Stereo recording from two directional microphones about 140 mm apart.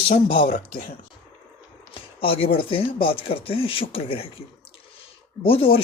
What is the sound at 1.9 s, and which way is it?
Speech, 40° left (ahead or behind).